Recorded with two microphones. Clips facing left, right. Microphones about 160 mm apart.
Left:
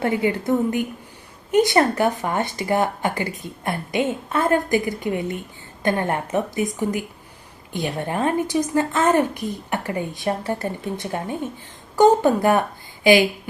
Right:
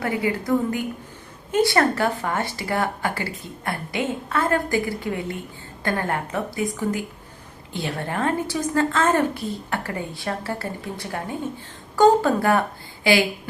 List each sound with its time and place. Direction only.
0.0 s a woman's voice: 25° left (ahead or behind)